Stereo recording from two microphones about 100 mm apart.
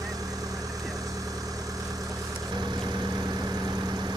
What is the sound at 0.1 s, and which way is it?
Vehicle, 40° right (ahead or behind).